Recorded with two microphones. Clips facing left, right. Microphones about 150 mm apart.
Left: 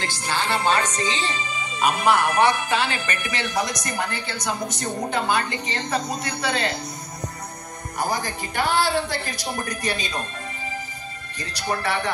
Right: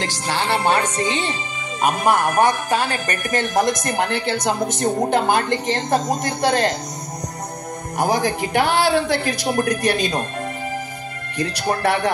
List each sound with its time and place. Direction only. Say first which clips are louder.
0.0 s a woman's voice: right 3 dB; 80° right; by 1.3 s 60° right (ahead or behind)
1.8 s speech: right 2 dB; 50° right (ahead or behind)
8.0 s a man's voice: right 7 dB; 85° right
11.3 s speech: right 6 dB; 55° right (ahead or behind)